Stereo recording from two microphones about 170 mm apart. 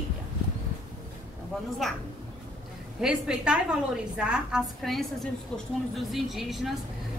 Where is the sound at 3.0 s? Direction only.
5° right (ahead or behind).